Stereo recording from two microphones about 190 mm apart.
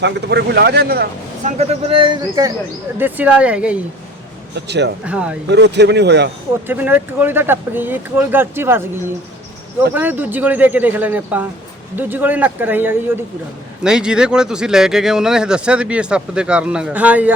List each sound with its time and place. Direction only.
0.0 s speech: 65° right (ahead or behind)
1.5 s speech: 35° right (ahead or behind)
3.0 s speech: 10° right (ahead or behind)
4.5 s speech: 65° right (ahead or behind)
5.0 s speech: 5° right (ahead or behind)
5.5 s speech: 65° right (ahead or behind)
6.7 s speech: 10° right (ahead or behind)
9.9 s speech: 10° right (ahead or behind)